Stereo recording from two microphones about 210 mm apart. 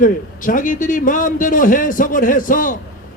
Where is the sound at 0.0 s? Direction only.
40° left (ahead or behind).